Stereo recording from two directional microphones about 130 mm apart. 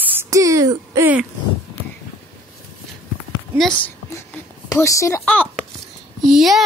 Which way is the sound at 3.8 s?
15° left (ahead or behind).